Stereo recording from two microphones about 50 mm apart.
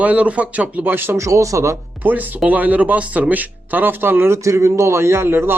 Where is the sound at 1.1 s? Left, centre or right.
Right.